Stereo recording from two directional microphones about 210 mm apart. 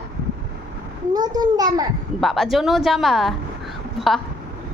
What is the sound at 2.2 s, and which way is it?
A woman's voice, centre (ahead or behind).